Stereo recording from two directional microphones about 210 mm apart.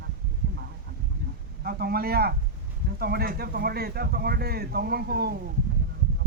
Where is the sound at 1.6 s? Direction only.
45° right (ahead or behind).